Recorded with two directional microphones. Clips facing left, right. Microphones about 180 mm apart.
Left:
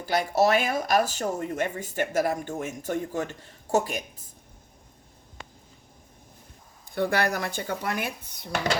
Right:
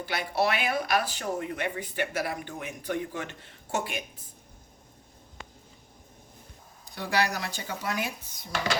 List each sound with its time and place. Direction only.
0.0 s speech: 45° left (ahead or behind)
6.9 s speech: 55° left (ahead or behind)